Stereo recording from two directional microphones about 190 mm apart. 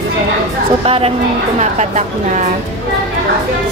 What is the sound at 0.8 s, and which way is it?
A woman's voice, 30° right (ahead or behind).